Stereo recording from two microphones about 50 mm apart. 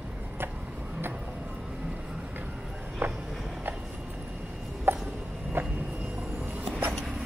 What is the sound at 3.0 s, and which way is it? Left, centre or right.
Walk, right.